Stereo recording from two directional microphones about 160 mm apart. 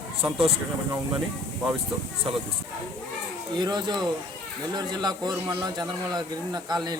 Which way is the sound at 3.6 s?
25° right (ahead or behind).